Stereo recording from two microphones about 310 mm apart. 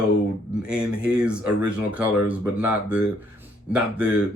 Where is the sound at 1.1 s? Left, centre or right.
Centre.